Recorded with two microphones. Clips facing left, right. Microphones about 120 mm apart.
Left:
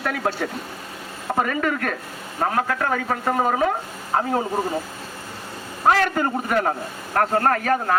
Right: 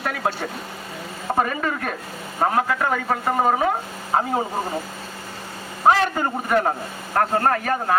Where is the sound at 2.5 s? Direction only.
15° right (ahead or behind).